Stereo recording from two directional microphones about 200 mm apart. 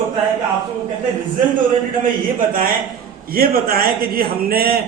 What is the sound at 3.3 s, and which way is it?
A man's voice, 50° right (ahead or behind).